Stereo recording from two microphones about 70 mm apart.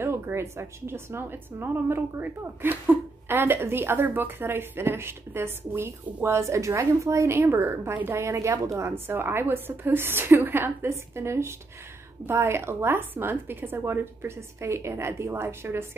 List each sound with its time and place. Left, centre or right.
0.0 s a woman's voice: right